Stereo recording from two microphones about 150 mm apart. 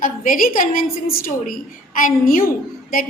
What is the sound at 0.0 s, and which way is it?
A woman's voice, 65° left (ahead or behind).